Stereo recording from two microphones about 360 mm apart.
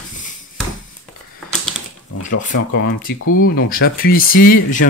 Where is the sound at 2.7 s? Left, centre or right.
Left.